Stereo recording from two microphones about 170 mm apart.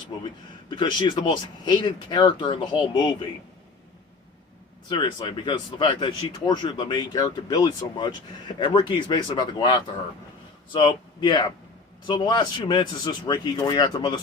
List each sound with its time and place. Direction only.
0.7 s speech: 25° left (ahead or behind)
4.9 s speech: 30° left (ahead or behind)